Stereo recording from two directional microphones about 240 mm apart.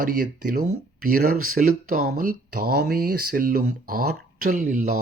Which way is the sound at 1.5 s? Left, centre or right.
Right.